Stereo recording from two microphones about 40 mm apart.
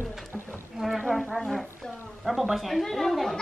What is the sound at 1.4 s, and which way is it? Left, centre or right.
Music, centre.